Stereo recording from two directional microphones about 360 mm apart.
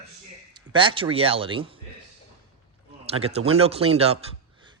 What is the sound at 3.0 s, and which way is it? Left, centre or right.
Speech, centre.